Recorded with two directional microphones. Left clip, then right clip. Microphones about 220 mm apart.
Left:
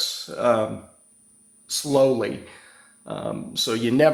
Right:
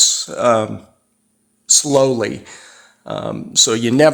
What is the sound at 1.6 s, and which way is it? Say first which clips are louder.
Speech: right 6 dB; 45° right (ahead or behind).